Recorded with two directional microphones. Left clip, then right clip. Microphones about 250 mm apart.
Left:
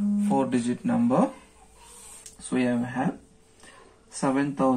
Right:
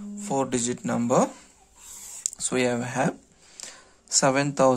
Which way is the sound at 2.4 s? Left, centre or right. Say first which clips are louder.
Right 2 dB; right.